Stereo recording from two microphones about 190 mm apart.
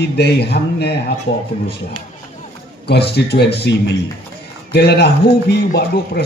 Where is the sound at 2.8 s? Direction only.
60° left (ahead or behind).